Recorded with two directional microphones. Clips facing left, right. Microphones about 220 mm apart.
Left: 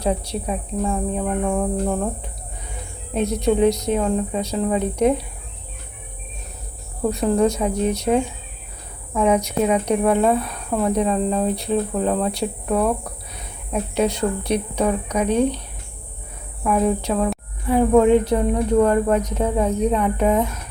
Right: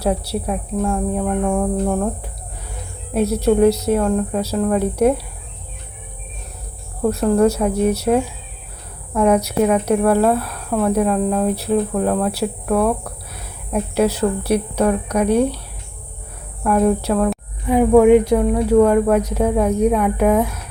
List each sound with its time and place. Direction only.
0.8 s speech: 5° left (ahead or behind)
3.2 s speech: 5° right (ahead or behind)
7.1 s speech: 5° right (ahead or behind)
9.3 s speech: 10° right (ahead or behind)
14.8 s speech: 10° left (ahead or behind)
15.2 s speech: 10° right (ahead or behind)
16.6 s speech: centre (ahead or behind)
17.7 s speech: 15° right (ahead or behind)